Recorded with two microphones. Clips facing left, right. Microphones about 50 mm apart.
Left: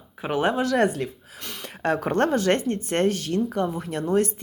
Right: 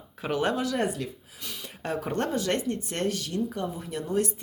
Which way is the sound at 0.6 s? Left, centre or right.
Left.